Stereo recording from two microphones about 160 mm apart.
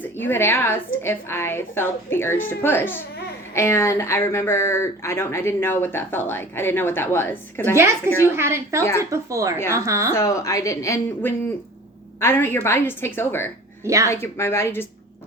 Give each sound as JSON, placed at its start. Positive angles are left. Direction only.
{"t": 0.0, "sound": "speech", "side_deg": 15}
{"t": 8.4, "sound": "a woman's voice", "side_deg": -15}
{"t": 10.1, "sound": "a woman's voice", "side_deg": 15}
{"t": 13.8, "sound": "speech", "side_deg": -20}
{"t": 14.1, "sound": "speech", "side_deg": 15}